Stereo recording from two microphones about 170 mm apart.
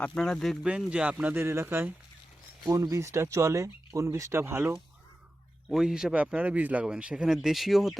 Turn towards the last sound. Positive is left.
turn(degrees=0)  # may be behind; listen again after turning